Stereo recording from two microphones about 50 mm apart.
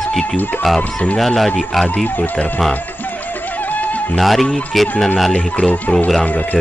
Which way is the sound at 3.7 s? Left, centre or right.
Left.